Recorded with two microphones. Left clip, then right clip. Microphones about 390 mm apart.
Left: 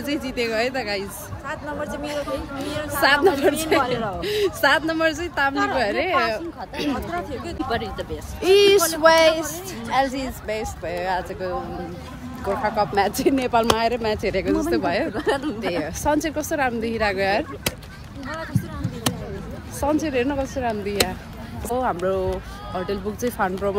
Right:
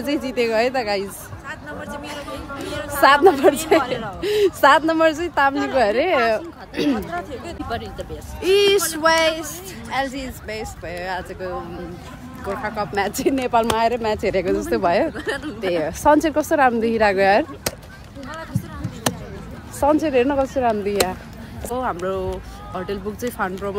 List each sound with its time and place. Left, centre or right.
0.0 s speech: centre
1.5 s speech: centre
2.3 s speech: centre
3.3 s speech: centre
3.8 s speech: centre
4.2 s speech: right
5.5 s speech: centre
5.8 s speech: right
7.1 s speech: centre
15.1 s speech: centre
15.8 s speech: right
18.3 s a sound: centre
19.8 s speech: right
21.7 s speech: centre